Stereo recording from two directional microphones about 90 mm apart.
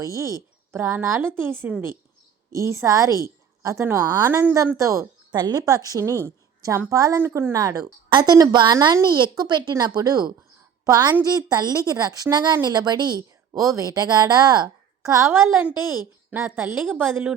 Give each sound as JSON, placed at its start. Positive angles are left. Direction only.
{"t": 0.7, "sound": "a woman's voice", "side_deg": -25}
{"t": 3.2, "sound": "a sound", "side_deg": -35}
{"t": 3.8, "sound": "a woman's voice", "side_deg": -25}
{"t": 4.8, "sound": "a woman's voice", "side_deg": -35}
{"t": 5.3, "sound": "a woman's voice", "side_deg": -55}
{"t": 7.2, "sound": "a woman's voice", "side_deg": -25}
{"t": 8.1, "sound": "a woman's voice", "side_deg": -50}